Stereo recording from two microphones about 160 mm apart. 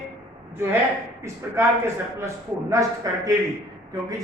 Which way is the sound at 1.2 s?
15° right (ahead or behind).